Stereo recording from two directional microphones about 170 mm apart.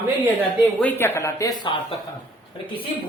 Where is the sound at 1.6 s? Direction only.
30° left (ahead or behind).